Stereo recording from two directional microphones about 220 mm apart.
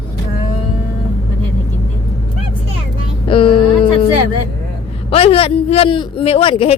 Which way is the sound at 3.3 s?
25° left (ahead or behind).